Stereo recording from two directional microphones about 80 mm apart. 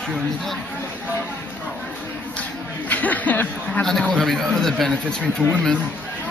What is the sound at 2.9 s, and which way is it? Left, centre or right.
Speech, centre.